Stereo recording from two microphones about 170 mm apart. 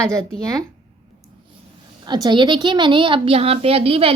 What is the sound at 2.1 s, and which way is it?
A woman's voice, 25° right (ahead or behind).